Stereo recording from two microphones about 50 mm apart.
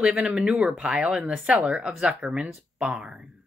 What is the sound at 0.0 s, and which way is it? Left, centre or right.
Speech, centre.